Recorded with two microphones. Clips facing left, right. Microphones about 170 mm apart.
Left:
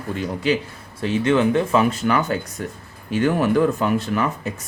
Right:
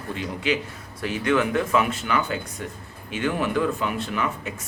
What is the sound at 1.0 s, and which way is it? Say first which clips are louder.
A man's voice: left 4 dB; 25° left (ahead or behind).